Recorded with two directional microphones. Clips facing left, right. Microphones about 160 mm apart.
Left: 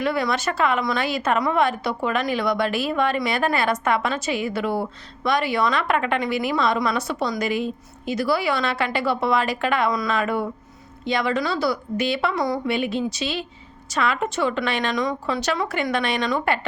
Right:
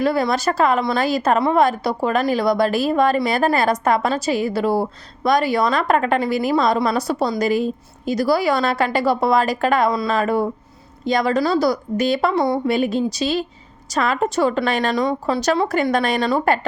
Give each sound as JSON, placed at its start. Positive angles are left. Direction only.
{"t": 0.0, "sound": "a woman's voice", "side_deg": -35}